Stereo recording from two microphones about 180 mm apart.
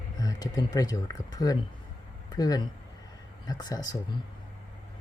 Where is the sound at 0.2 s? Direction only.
20° left (ahead or behind).